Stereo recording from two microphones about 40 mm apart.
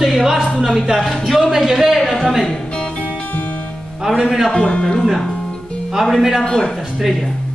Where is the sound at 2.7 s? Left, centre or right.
Left.